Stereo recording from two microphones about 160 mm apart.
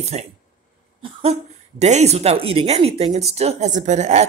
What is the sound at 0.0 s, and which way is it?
A woman's voice, 40° right (ahead or behind).